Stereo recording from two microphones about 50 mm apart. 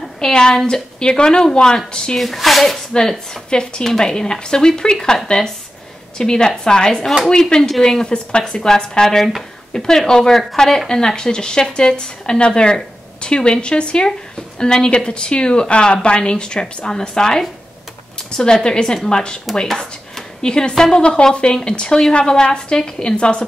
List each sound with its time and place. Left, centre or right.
0.2 s a woman's voice: centre
2.1 s speech: centre
2.9 s a woman's voice: centre